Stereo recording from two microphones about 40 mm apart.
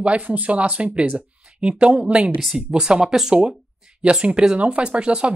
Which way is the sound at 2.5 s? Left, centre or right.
Right.